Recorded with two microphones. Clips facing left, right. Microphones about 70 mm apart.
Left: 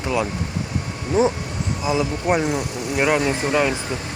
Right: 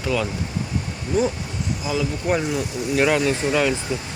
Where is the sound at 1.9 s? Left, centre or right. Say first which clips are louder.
Left 3 dB; left.